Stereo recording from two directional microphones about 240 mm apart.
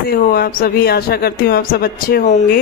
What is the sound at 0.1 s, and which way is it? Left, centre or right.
Speech, left.